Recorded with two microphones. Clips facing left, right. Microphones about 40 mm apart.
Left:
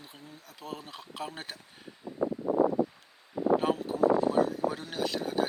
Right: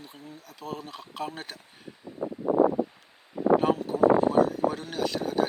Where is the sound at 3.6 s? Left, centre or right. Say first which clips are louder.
Right 4 dB; centre.